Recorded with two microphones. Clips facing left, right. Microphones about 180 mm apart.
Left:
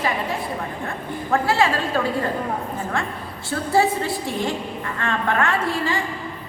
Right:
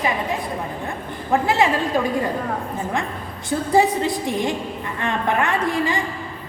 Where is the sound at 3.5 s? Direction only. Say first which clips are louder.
Right 2 dB; 15° right (ahead or behind).